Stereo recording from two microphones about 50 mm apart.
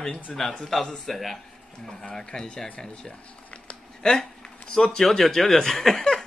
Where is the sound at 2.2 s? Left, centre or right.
Centre.